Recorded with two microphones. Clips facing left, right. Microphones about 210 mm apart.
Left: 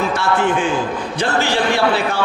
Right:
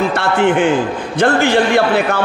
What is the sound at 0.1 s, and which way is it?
A man's voice, 65° right (ahead or behind).